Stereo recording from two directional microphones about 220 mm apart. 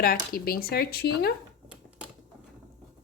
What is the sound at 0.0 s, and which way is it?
A woman's voice, 40° left (ahead or behind).